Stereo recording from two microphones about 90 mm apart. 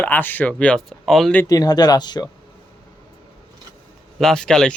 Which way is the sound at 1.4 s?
45° left (ahead or behind).